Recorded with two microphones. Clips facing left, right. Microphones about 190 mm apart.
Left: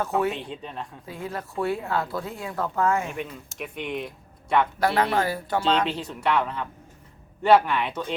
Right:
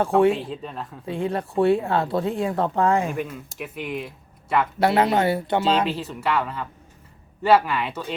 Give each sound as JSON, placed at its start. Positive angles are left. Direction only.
{"t": 0.0, "sound": "speech", "side_deg": -30}
{"t": 0.4, "sound": "speech", "side_deg": 0}
{"t": 1.0, "sound": "speech", "side_deg": -30}
{"t": 3.2, "sound": "speech", "side_deg": -5}
{"t": 4.8, "sound": "speech", "side_deg": -25}
{"t": 5.6, "sound": "speech", "side_deg": -5}